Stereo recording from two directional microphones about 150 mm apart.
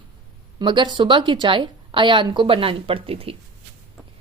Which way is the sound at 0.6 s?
30° right (ahead or behind).